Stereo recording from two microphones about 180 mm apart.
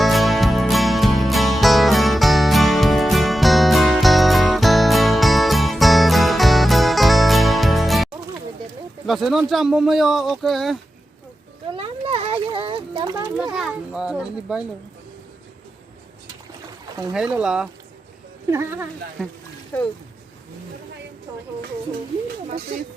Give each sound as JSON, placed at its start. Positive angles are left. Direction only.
{"t": 0.0, "sound": "music", "side_deg": 0}
{"t": 9.0, "sound": "speech", "side_deg": 0}
{"t": 11.7, "sound": "a sound", "side_deg": -30}
{"t": 13.2, "sound": "speech", "side_deg": -5}
{"t": 17.2, "sound": "speech", "side_deg": -5}
{"t": 19.2, "sound": "speech", "side_deg": 0}